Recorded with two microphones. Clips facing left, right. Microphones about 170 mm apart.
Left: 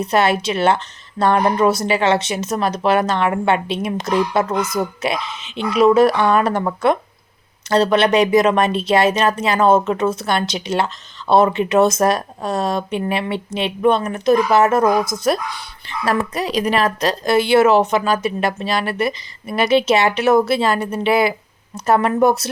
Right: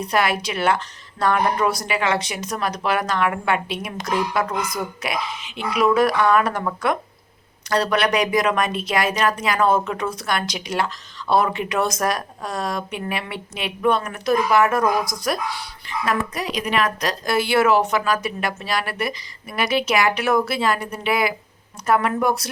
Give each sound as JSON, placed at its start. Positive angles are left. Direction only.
{"t": 0.0, "sound": "speech", "side_deg": 25}